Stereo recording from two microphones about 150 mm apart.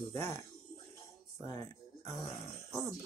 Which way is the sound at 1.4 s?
20° left (ahead or behind).